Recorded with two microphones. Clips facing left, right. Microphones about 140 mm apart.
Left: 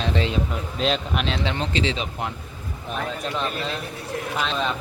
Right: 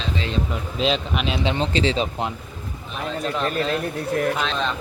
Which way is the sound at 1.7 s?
35° right (ahead or behind).